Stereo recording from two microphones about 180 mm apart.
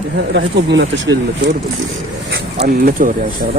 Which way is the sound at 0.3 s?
85° right.